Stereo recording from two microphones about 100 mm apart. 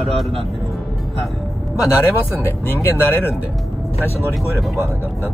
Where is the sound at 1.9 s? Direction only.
25° left (ahead or behind).